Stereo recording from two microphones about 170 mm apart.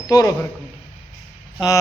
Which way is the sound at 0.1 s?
20° left (ahead or behind).